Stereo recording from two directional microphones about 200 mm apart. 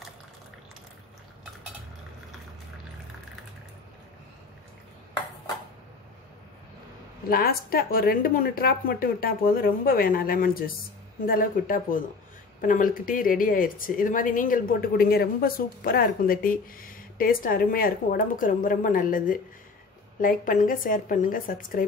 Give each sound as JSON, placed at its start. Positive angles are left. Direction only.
{"t": 7.2, "sound": "speech", "side_deg": 50}